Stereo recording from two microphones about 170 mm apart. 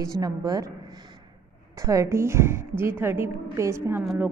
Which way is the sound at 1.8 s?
20° right (ahead or behind).